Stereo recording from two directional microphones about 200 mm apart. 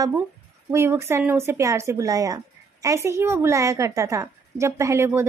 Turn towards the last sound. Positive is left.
turn(degrees=-10)  # may be behind; listen again after turning